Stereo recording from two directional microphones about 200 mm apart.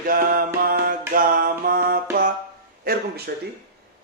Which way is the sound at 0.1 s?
45° right (ahead or behind).